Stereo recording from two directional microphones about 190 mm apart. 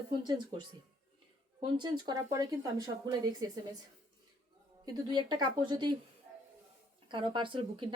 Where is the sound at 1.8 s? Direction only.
20° right (ahead or behind).